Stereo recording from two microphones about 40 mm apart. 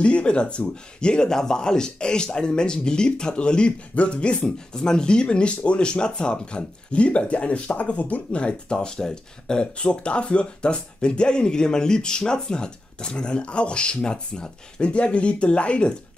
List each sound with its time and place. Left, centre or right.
0.0 s speech: left
4.4 s speech: centre